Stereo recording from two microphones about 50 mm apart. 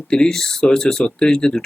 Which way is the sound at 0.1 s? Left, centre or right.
Centre.